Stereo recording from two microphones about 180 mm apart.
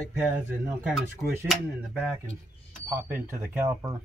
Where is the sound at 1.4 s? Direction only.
5° right (ahead or behind).